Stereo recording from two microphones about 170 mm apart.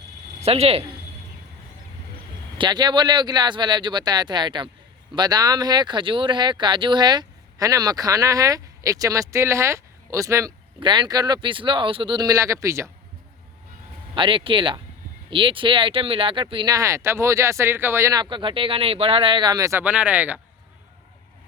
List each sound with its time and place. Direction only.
0.4 s speech: 35° right (ahead or behind)
2.6 s speech: 25° right (ahead or behind)
14.2 s speech: 30° right (ahead or behind); by 20.4 s 10° right (ahead or behind)